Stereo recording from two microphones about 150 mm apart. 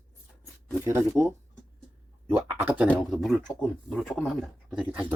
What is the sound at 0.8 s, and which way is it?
Speech, 15° right (ahead or behind).